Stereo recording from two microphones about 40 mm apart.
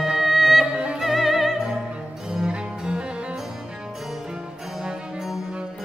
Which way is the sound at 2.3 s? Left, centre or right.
Right.